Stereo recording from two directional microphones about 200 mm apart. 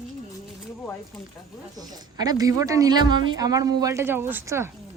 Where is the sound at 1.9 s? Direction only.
20° right (ahead or behind).